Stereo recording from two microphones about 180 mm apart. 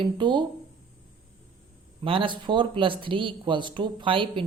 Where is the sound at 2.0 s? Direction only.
30° right (ahead or behind).